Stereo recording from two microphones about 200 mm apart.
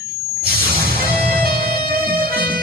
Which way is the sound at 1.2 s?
50° right (ahead or behind).